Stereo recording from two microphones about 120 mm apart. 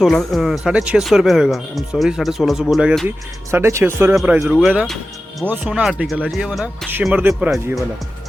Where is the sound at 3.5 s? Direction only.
20° right (ahead or behind); by 6.8 s centre (ahead or behind).